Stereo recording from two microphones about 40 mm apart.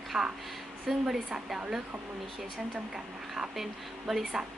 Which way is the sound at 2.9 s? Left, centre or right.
Centre.